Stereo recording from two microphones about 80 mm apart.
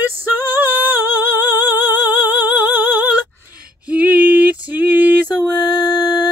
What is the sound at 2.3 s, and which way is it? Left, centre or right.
Music, right.